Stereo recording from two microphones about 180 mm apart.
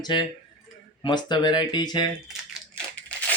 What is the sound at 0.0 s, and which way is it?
Speech, 25° left (ahead or behind).